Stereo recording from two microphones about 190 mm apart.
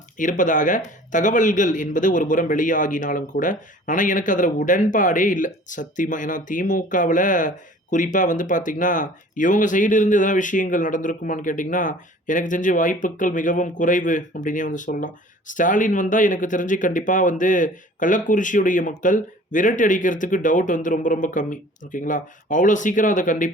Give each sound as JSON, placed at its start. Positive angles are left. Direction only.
{"t": 0.2, "sound": "a man's voice", "side_deg": 45}